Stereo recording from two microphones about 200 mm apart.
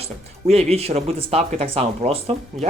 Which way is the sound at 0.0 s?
30° right (ahead or behind).